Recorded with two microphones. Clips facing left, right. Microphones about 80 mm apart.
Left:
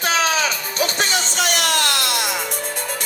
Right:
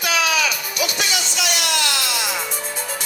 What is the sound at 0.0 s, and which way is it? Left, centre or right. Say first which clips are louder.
Music: left 1 dB; left.